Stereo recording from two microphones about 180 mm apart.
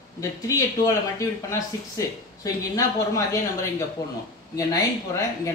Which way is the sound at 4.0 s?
20° left (ahead or behind).